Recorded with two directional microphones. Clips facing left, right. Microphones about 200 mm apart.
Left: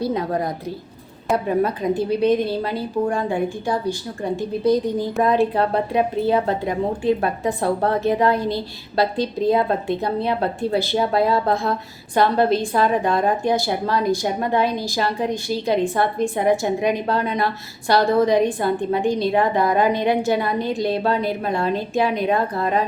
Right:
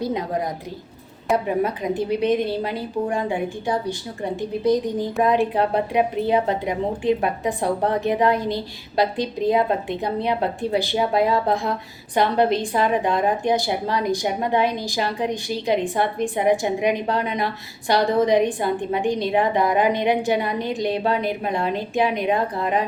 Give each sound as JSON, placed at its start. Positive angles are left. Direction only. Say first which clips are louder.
{"t": 0.0, "sound": "a woman's voice", "louder": "left 2 dB", "side_deg": -20}
{"t": 1.6, "sound": "a woman's voice", "louder": "left 2 dB", "side_deg": -20}